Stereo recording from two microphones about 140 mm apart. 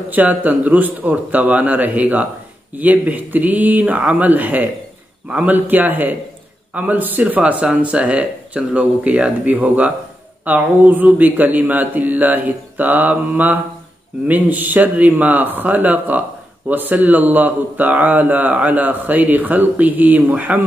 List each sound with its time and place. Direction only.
0.1 s speech: 10° right (ahead or behind)